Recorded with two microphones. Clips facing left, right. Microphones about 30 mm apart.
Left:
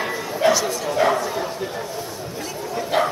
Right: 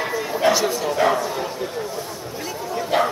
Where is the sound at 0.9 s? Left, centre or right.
Centre.